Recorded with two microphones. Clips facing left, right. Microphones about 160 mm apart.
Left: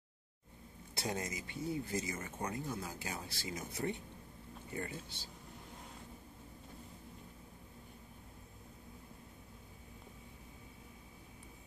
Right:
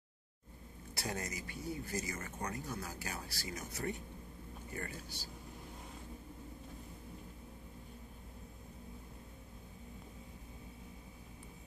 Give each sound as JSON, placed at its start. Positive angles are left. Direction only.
{"t": 0.9, "sound": "speech", "side_deg": 25}